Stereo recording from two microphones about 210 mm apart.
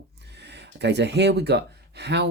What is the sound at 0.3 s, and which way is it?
Speech, 55° right (ahead or behind).